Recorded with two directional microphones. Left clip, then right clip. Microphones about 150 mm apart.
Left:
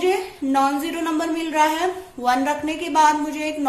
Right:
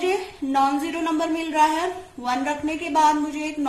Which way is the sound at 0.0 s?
35° left (ahead or behind).